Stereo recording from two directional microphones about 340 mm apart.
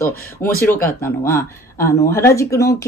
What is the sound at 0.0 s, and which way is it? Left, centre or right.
Speech, centre.